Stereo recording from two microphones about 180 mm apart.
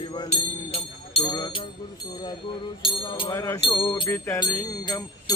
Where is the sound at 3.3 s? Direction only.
15° left (ahead or behind).